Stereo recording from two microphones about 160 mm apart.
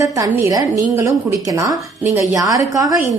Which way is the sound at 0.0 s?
20° right (ahead or behind).